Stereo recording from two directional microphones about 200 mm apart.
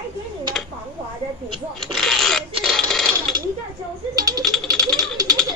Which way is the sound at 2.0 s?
Centre (ahead or behind).